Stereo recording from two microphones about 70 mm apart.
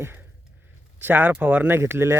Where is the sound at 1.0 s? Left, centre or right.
Right.